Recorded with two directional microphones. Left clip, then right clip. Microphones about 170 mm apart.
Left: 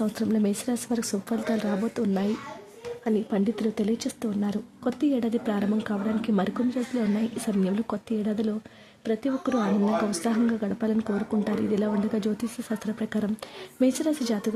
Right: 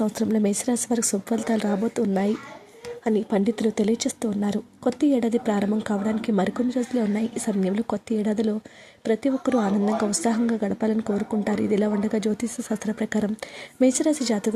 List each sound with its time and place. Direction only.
0.0 s a woman's voice: 20° right (ahead or behind)